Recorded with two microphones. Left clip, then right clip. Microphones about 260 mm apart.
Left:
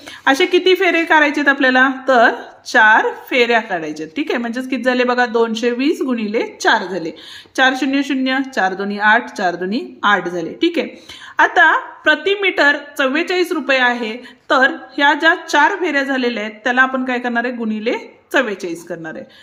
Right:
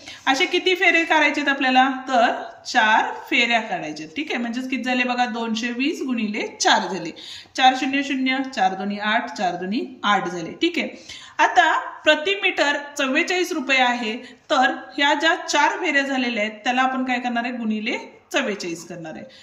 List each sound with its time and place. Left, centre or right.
0.3 s a woman's voice: centre